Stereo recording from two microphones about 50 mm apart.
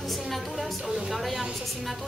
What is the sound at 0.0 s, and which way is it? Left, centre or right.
Music, centre.